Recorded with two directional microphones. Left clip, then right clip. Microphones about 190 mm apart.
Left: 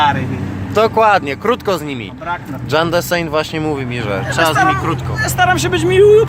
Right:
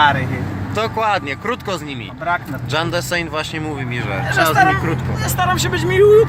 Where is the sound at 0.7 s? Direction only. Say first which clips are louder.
Left 7 dB; 30° left (ahead or behind).